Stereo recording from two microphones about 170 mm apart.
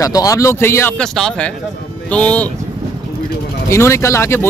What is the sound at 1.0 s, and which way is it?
A man's voice, 5° left (ahead or behind).